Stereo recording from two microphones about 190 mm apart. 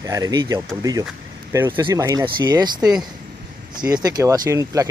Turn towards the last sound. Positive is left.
turn(degrees=-15)  # may be behind; listen again after turning